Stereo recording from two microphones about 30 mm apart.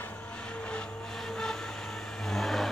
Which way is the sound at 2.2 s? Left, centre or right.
Centre.